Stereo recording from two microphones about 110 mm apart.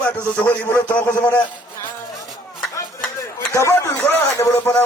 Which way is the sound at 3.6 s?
25° left (ahead or behind).